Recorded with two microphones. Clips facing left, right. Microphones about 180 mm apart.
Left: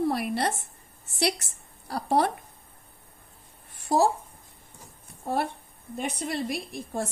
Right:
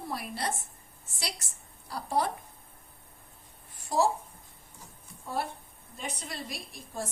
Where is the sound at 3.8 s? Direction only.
70° left (ahead or behind).